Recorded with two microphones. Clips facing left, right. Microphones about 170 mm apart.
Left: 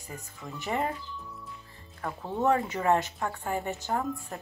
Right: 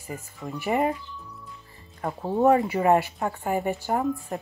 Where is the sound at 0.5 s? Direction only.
15° right (ahead or behind).